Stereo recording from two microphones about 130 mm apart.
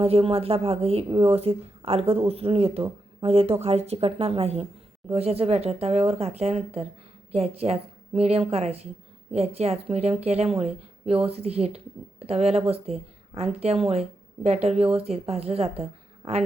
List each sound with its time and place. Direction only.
0.0 s speech: 45° right (ahead or behind)